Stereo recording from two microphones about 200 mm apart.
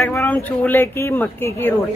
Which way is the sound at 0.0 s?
10° left (ahead or behind).